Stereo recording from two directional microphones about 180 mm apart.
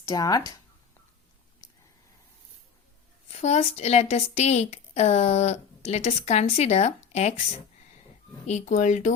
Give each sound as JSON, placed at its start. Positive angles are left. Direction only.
{"t": 0.0, "sound": "speech", "side_deg": 20}
{"t": 3.2, "sound": "a woman's voice", "side_deg": 40}
{"t": 8.4, "sound": "a woman's voice", "side_deg": 40}